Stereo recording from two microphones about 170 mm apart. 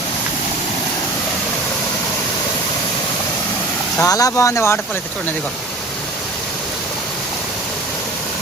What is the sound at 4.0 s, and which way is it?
Speech, 20° left (ahead or behind).